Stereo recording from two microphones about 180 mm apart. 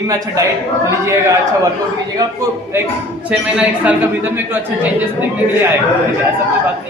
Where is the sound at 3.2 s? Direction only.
5° right (ahead or behind).